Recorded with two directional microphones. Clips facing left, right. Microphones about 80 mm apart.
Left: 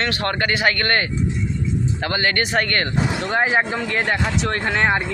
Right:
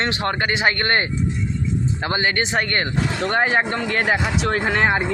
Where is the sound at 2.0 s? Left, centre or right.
Centre.